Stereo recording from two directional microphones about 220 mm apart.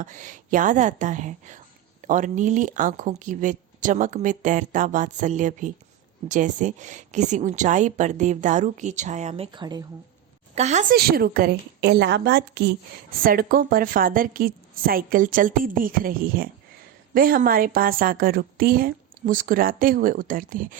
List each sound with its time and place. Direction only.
0.0 s a woman's voice: 35° right (ahead or behind); by 9.8 s 20° right (ahead or behind)
10.5 s a woman's voice: 30° right (ahead or behind)
10.9 s a woman's voice: 45° right (ahead or behind)